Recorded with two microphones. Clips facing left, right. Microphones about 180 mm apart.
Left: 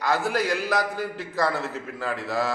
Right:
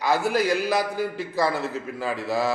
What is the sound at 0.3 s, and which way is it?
A man's voice, 15° right (ahead or behind).